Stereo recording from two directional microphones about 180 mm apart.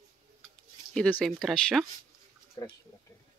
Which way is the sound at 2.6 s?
20° left (ahead or behind).